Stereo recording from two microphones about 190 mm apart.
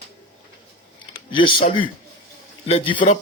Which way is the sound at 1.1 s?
25° left (ahead or behind).